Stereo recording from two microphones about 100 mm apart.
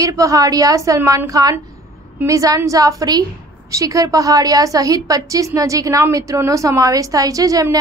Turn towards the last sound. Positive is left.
turn(degrees=-35)  # may be behind; listen again after turning